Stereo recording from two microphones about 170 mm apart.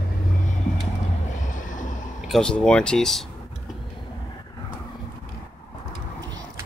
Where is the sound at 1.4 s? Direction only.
50° left (ahead or behind).